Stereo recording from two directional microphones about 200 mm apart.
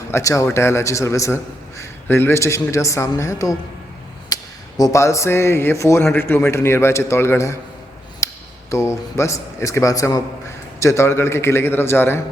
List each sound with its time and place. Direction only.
0.1 s a man's voice: 15° left (ahead or behind)
4.3 s a sound: 20° left (ahead or behind)
4.8 s a man's voice: 15° left (ahead or behind)
8.7 s a man's voice: 15° left (ahead or behind)